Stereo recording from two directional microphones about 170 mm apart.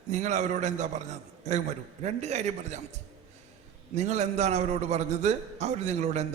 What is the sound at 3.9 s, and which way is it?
A man's voice, 40° right (ahead or behind).